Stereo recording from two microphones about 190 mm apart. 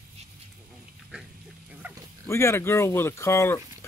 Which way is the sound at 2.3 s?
15° left (ahead or behind).